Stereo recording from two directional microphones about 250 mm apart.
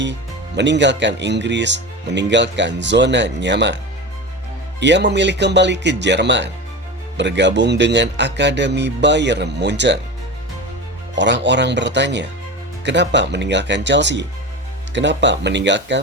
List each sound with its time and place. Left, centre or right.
0.0 s speech: right
4.8 s speech: right
11.1 s speech: right